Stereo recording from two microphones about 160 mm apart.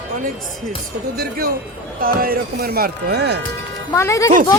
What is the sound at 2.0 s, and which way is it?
Speech, 65° right (ahead or behind).